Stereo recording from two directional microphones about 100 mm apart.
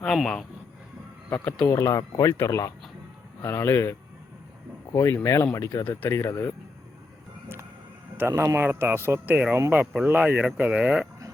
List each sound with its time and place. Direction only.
0.0 s speech: 5° left (ahead or behind)
1.7 s speech: 35° left (ahead or behind)
8.2 s speech: 30° right (ahead or behind); by 11.1 s 10° right (ahead or behind)